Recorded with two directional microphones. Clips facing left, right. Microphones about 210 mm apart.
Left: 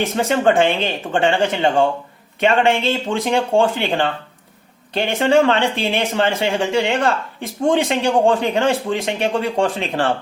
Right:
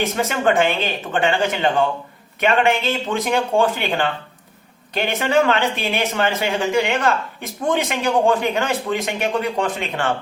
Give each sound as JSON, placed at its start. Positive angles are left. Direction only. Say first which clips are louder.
{"t": 0.0, "sound": "speech", "louder": "left 3 dB", "side_deg": 30}